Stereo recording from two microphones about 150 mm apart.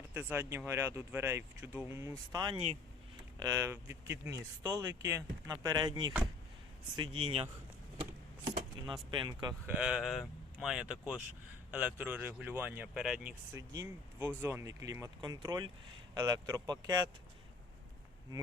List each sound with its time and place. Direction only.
0.1 s speech: 15° right (ahead or behind); by 7.4 s 40° right (ahead or behind)
8.9 s speech: 35° right (ahead or behind)
9.6 s speech: 5° right (ahead or behind)
13.5 s speech: 15° right (ahead or behind)